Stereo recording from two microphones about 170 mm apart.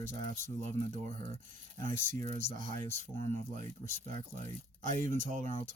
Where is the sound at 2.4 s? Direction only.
50° right (ahead or behind).